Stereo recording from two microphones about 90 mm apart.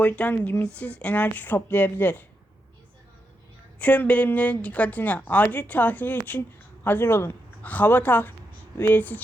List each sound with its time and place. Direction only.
0.3 s speech: 25° left (ahead or behind)
0.6 s speech: 15° left (ahead or behind)
3.8 s speech: 15° left (ahead or behind)